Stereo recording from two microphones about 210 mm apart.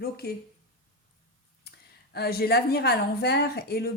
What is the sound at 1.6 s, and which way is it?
Speech, 50° left (ahead or behind).